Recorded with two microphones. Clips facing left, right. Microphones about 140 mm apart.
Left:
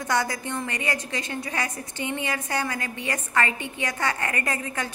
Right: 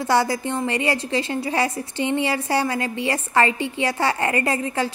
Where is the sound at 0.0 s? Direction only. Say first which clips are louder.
Right 6 dB; 30° right (ahead or behind).